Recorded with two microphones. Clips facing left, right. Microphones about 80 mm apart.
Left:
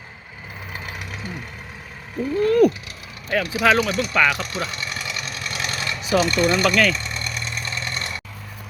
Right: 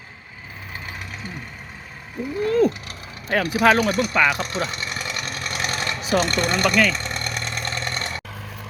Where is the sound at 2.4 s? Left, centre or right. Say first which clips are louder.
Left 3 dB; right.